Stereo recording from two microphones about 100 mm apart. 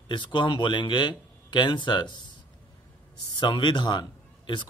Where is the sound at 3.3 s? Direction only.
50° left (ahead or behind).